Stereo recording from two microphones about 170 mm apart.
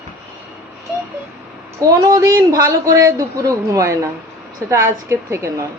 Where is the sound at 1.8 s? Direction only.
20° right (ahead or behind).